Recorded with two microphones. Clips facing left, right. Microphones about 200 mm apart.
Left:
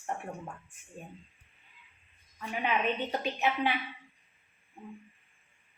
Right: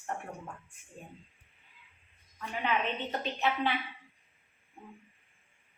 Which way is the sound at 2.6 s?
15° left (ahead or behind).